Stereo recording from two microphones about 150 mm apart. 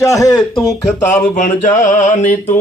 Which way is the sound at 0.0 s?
20° left (ahead or behind).